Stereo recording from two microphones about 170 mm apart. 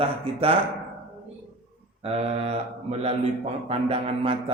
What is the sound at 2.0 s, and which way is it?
Speech, 35° right (ahead or behind).